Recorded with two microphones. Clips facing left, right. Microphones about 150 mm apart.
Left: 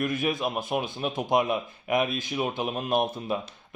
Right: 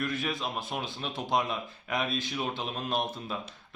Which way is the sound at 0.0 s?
15° left (ahead or behind).